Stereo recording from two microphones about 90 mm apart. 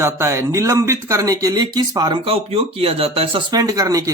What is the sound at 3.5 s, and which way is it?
Speech, 45° right (ahead or behind).